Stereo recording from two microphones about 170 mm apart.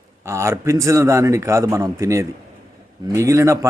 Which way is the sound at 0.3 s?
15° right (ahead or behind).